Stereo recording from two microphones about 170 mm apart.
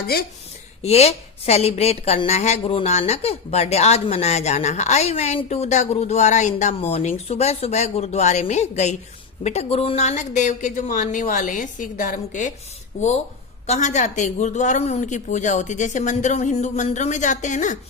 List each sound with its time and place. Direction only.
0.8 s a woman's voice: 40° left (ahead or behind)
13.7 s a woman's voice: 45° left (ahead or behind)